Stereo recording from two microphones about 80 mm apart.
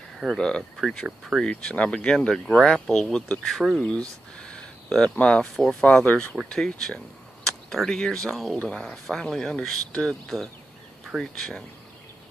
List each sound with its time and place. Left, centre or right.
0.4 s speech: centre
1.4 s speech: centre
4.4 s a sound: centre
5.1 s speech: centre